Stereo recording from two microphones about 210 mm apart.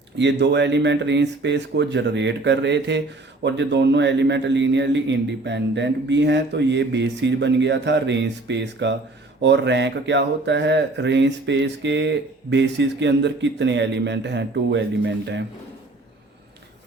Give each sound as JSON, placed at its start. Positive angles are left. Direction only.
{"t": 0.2, "sound": "speech", "side_deg": -55}